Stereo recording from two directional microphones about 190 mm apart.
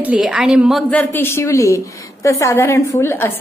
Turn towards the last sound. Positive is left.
turn(degrees=15)  # may be behind; listen again after turning